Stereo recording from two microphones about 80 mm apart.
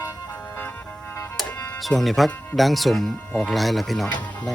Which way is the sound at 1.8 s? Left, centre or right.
Centre.